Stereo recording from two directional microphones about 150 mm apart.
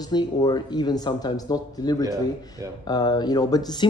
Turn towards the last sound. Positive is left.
turn(degrees=25)  # may be behind; listen again after turning